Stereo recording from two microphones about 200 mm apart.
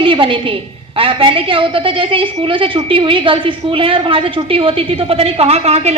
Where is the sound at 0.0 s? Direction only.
25° right (ahead or behind).